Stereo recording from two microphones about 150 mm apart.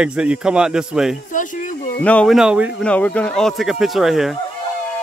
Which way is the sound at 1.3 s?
60° left (ahead or behind).